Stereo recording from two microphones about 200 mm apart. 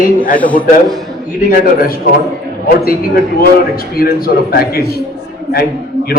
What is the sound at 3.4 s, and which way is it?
A man's voice, 45° left (ahead or behind).